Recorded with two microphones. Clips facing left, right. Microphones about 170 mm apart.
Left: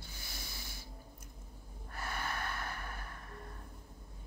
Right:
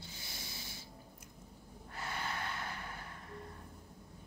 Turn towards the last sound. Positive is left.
turn(degrees=-20)  # may be behind; listen again after turning